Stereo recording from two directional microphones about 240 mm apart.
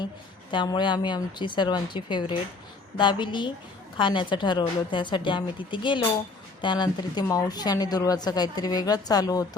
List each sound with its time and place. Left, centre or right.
0.5 s a woman's voice: centre